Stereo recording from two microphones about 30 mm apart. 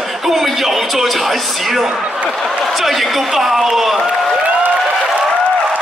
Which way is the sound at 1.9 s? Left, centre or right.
Right.